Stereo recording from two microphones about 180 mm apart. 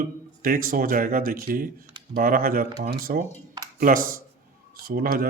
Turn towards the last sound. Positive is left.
turn(degrees=-55)  # may be behind; listen again after turning